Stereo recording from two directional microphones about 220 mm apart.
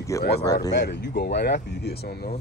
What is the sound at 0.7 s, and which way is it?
Speech, 50° left (ahead or behind).